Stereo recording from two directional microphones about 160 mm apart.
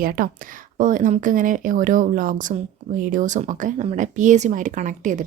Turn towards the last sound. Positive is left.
turn(degrees=-50)  # may be behind; listen again after turning